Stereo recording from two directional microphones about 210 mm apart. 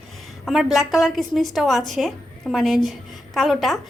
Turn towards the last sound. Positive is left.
turn(degrees=0)  # may be behind; listen again after turning